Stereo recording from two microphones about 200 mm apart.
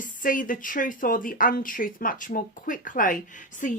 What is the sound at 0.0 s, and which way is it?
Speech, 40° left (ahead or behind).